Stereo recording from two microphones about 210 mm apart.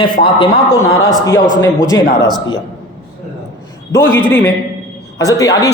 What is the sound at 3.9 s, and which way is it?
Speech, 10° left (ahead or behind).